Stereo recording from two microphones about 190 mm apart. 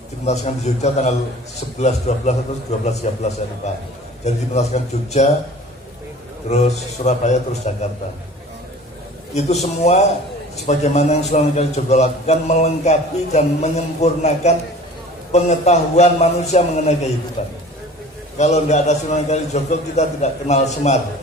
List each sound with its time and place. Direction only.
0.3 s a man's voice: 35° left (ahead or behind)
6.5 s a man's voice: 35° left (ahead or behind)
9.3 s a man's voice: 35° left (ahead or behind)